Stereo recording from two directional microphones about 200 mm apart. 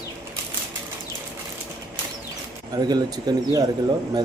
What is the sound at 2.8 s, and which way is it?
Speech, 20° right (ahead or behind).